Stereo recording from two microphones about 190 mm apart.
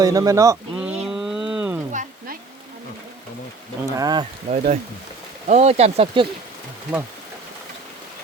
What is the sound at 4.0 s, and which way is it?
Speech, 20° right (ahead or behind).